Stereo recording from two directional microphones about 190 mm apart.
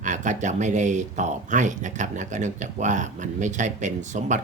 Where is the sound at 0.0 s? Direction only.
40° right (ahead or behind).